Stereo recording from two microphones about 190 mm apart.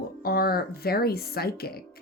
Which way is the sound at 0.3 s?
55° left (ahead or behind).